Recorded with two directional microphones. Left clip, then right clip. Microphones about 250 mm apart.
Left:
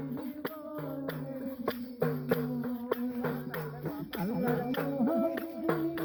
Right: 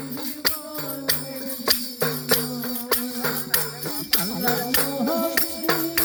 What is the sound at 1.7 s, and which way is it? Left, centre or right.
Music, centre.